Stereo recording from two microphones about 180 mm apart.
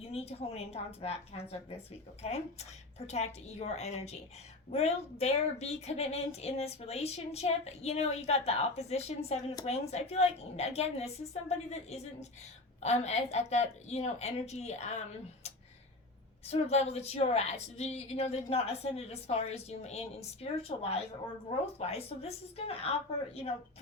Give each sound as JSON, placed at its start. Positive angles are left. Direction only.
{"t": 0.0, "sound": "speech", "side_deg": 35}
{"t": 16.5, "sound": "speech", "side_deg": 35}